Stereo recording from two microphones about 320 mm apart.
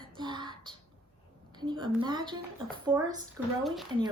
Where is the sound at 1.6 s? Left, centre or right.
Centre.